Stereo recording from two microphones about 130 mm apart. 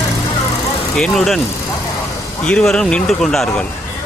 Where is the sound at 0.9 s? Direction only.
5° left (ahead or behind).